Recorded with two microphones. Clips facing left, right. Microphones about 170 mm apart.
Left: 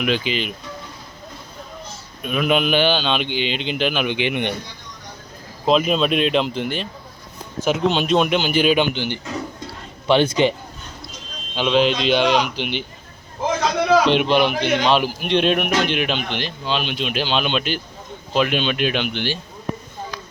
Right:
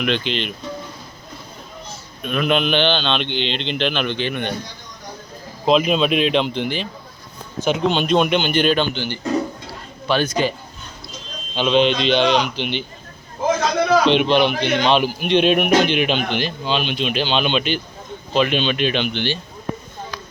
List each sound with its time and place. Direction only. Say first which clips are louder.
0.0 s speech: even; 5° left (ahead or behind)
2.2 s a man's voice: even; 5° left (ahead or behind)
5.6 s speech: right 1 dB; centre (ahead or behind)
9.0 s a man's voice: right 4 dB; 20° left (ahead or behind)
11.5 s a man's voice: right 1 dB; 5° left (ahead or behind)
14.0 s a man's voice: right 1 dB; 5° left (ahead or behind)